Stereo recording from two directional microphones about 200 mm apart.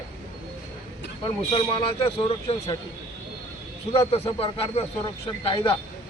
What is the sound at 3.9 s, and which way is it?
Speech, 30° left (ahead or behind).